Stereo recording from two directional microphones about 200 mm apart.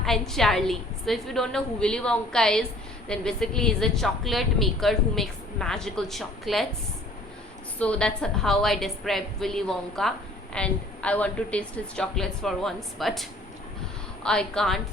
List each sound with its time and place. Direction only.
0.0 s a woman's voice: centre (ahead or behind)
7.8 s a woman's voice: 5° left (ahead or behind)
14.3 s a woman's voice: 5° left (ahead or behind)